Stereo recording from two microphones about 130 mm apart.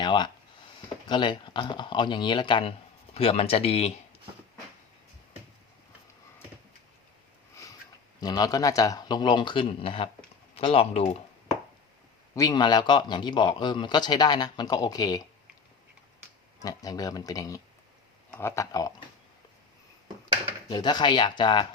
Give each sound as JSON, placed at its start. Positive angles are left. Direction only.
{"t": 0.0, "sound": "speech", "side_deg": 35}
{"t": 8.2, "sound": "speech", "side_deg": 30}
{"t": 12.3, "sound": "speech", "side_deg": 30}
{"t": 16.6, "sound": "speech", "side_deg": 30}
{"t": 20.7, "sound": "speech", "side_deg": 35}